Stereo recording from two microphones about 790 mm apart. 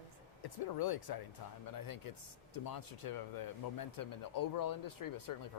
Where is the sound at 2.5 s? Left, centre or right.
Left.